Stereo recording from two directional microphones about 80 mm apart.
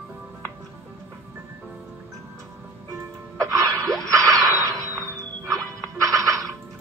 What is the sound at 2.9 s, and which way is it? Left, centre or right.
Music, right.